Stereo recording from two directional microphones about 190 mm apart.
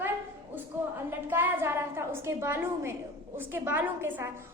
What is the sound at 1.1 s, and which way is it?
A woman's voice, 10° right (ahead or behind).